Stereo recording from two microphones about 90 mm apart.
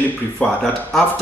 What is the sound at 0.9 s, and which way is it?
Speech, centre (ahead or behind).